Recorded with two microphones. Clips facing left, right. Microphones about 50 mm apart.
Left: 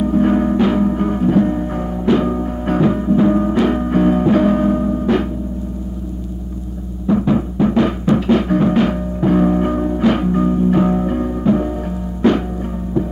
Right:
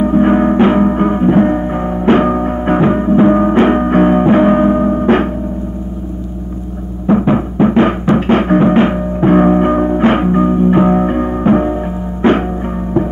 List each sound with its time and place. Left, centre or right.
0.0 s music: right
7.1 s timpani: right
12.2 s music: right